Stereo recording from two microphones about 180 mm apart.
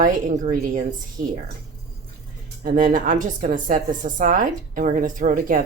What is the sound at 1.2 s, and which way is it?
Speech, 50° right (ahead or behind).